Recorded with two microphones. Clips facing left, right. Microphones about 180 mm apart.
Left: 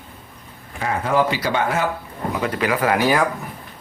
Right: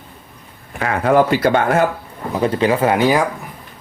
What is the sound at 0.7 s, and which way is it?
Speech, 65° right (ahead or behind).